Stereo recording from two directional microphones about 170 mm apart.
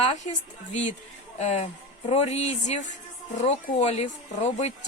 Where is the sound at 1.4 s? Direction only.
40° left (ahead or behind).